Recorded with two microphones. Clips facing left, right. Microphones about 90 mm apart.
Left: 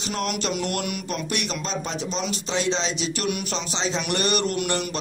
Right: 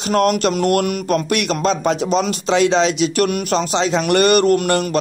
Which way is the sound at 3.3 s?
50° right (ahead or behind).